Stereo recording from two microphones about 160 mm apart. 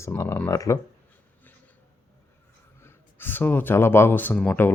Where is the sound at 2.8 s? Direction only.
15° left (ahead or behind).